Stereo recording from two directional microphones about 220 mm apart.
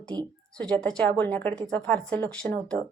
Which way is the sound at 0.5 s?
5° left (ahead or behind).